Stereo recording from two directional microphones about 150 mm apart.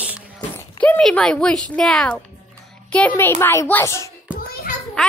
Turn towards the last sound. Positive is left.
turn(degrees=75)  # may be behind; listen again after turning